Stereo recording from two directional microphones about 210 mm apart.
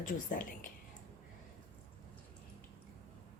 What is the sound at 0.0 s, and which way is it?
Speech, 40° left (ahead or behind).